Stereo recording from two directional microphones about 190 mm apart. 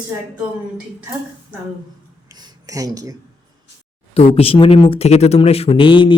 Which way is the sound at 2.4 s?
20° right (ahead or behind).